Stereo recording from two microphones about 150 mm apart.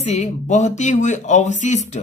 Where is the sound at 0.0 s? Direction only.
50° left (ahead or behind).